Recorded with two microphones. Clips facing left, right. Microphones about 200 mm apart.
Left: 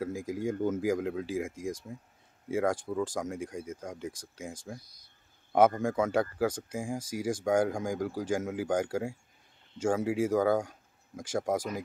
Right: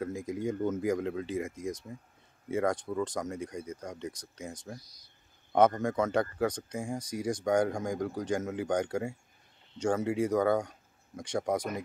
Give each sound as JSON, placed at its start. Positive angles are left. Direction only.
{"t": 0.0, "sound": "speech", "side_deg": 5}
{"t": 4.7, "sound": "speech", "side_deg": 55}
{"t": 5.8, "sound": "speech", "side_deg": 10}